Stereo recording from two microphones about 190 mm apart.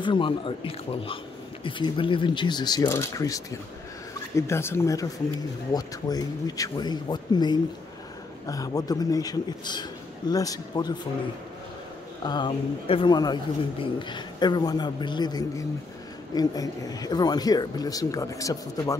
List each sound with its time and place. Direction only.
0.0 s speech: 25° left (ahead or behind)
12.2 s speech: 25° left (ahead or behind)